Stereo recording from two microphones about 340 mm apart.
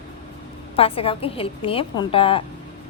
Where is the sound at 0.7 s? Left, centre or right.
Centre.